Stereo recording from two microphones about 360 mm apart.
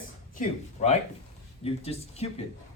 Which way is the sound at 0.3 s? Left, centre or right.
Centre.